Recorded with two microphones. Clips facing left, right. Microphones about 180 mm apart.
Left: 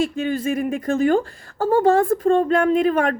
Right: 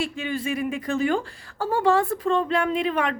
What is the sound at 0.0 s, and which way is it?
Speech, 45° left (ahead or behind).